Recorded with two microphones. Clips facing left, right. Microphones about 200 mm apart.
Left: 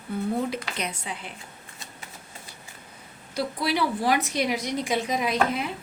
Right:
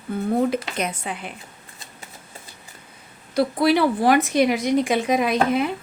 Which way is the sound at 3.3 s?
55° right (ahead or behind).